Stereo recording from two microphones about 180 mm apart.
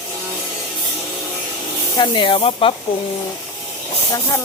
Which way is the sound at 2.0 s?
25° left (ahead or behind).